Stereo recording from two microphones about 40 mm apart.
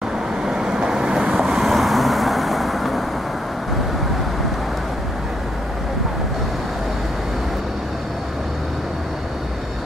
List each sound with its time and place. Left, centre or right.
0.5 s vehicle: centre
1.4 s vehicle: centre